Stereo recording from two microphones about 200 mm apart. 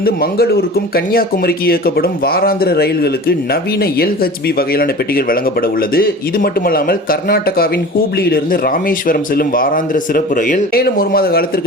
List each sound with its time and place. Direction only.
0.0 s speech: 50° left (ahead or behind)